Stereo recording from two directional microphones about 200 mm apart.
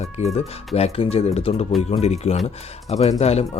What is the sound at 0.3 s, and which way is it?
Speech, 30° left (ahead or behind).